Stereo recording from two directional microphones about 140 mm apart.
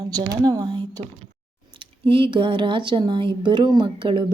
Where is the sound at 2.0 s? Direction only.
40° right (ahead or behind).